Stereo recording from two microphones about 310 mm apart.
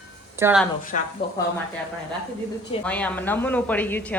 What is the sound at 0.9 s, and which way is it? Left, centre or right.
Speech, left.